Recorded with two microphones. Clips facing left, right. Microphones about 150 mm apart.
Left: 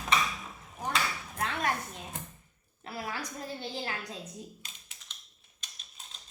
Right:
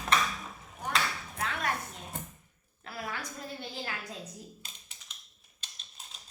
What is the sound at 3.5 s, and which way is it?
Speech, 30° left (ahead or behind).